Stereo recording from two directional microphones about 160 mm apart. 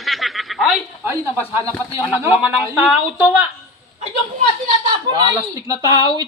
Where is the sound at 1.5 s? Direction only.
15° right (ahead or behind).